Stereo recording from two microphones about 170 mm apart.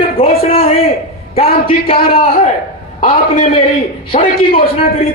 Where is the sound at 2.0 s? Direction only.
60° left (ahead or behind).